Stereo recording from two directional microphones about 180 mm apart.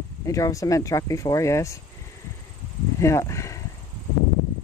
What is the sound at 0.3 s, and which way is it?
Speech, 20° left (ahead or behind).